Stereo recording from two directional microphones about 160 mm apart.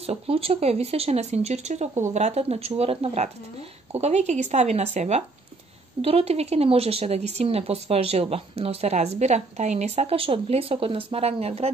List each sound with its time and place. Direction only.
0.0 s speech: 40° right (ahead or behind)